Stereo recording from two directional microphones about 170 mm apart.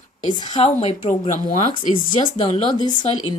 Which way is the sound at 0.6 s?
40° left (ahead or behind).